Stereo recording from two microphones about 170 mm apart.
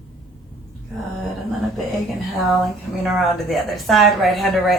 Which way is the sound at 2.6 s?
Centre (ahead or behind).